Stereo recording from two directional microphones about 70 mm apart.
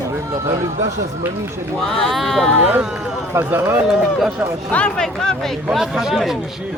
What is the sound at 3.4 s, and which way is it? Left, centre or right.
Speech, right.